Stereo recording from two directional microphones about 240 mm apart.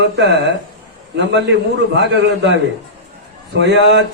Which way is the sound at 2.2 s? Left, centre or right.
Right.